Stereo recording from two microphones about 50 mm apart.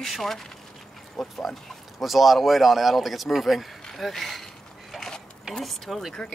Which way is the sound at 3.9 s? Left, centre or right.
Centre.